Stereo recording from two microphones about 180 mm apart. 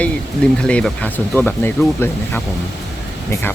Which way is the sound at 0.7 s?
5° left (ahead or behind).